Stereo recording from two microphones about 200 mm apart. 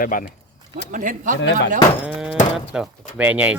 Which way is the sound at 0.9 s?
40° right (ahead or behind).